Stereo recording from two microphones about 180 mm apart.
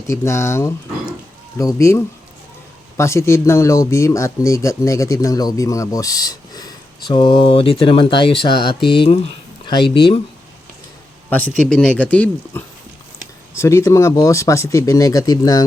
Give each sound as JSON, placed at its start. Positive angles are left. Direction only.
{"t": 0.1, "sound": "speech", "side_deg": 15}
{"t": 3.0, "sound": "speech", "side_deg": 15}
{"t": 11.3, "sound": "speech", "side_deg": 10}